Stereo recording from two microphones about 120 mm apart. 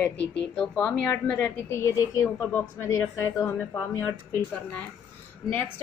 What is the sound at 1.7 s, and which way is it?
A woman's voice, 25° left (ahead or behind).